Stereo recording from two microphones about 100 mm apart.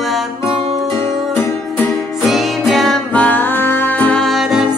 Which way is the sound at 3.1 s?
15° left (ahead or behind).